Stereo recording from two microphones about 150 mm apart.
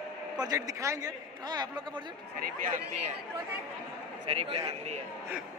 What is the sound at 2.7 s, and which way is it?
Speech, 50° right (ahead or behind).